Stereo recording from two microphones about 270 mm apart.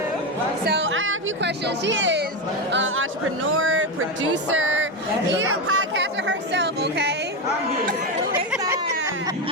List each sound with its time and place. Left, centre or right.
0.6 s speech: right
4.5 s a sound: right
5.3 s speech: right